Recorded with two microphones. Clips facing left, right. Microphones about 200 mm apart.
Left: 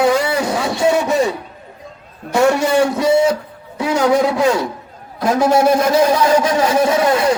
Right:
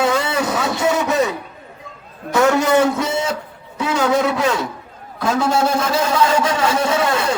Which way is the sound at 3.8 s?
25° left (ahead or behind).